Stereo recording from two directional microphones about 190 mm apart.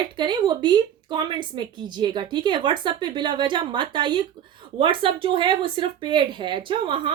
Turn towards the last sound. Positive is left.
turn(degrees=-25)  # may be behind; listen again after turning